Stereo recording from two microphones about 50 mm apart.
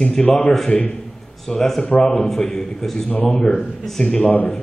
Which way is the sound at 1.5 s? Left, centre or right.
Centre.